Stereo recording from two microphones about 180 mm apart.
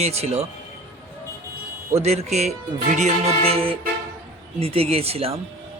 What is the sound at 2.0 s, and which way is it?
A man's voice, 35° right (ahead or behind).